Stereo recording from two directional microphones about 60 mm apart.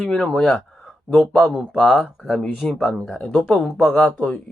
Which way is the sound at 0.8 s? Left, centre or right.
Centre.